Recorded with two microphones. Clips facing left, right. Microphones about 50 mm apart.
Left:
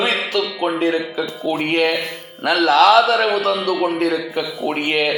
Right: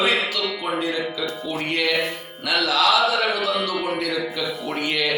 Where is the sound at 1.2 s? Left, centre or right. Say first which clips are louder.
Left 5 dB; left.